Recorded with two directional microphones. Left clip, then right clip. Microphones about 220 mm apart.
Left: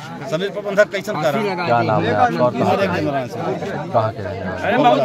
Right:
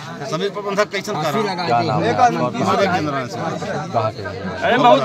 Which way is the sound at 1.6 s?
35° left (ahead or behind).